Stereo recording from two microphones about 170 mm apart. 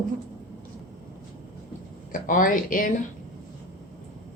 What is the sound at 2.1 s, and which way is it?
Speech, 55° left (ahead or behind).